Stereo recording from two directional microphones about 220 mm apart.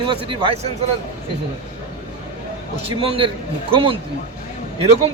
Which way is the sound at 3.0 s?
25° right (ahead or behind).